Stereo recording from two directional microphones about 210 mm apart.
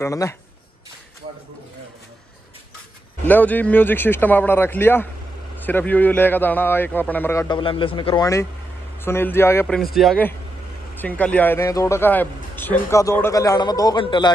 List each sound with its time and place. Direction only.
0.0 s a man's voice: 15° left (ahead or behind)
3.3 s a man's voice: 10° left (ahead or behind)
7.4 s a man's voice: 25° left (ahead or behind)